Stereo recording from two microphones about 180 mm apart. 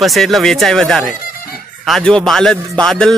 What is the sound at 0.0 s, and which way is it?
A man's voice, centre (ahead or behind).